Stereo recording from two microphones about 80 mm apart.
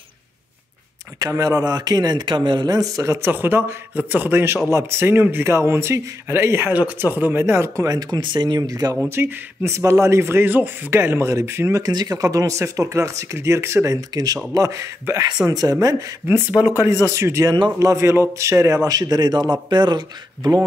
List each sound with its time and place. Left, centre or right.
1.3 s a man's voice: right
2.7 s speech: right
3.3 s speech: right
7.9 s speech: right
8.5 s a man's voice: right
9.1 s speech: right
9.7 s speech: right
11.8 s speech: right
14.1 s a man's voice: right
16.3 s speech: right
16.8 s speech: right
18.9 s speech: right